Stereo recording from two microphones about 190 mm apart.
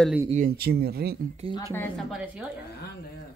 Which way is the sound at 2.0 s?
5° right (ahead or behind).